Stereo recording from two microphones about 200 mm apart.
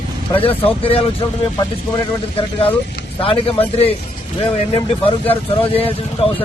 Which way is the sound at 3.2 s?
30° left (ahead or behind).